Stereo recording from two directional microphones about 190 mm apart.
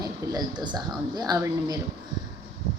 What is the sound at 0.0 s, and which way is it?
Speech, 20° right (ahead or behind).